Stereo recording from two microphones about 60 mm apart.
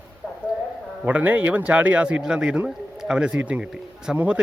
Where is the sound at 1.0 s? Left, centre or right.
Right.